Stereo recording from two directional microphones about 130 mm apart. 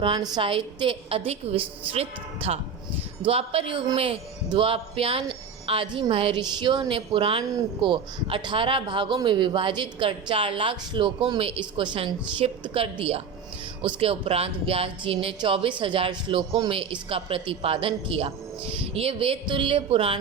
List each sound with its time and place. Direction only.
0.0 s a woman's voice: 35° right (ahead or behind)